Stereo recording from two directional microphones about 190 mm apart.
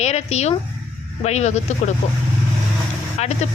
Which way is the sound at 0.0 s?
35° left (ahead or behind).